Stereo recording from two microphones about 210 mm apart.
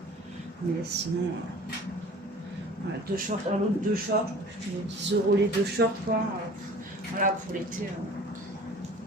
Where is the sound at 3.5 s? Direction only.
30° right (ahead or behind).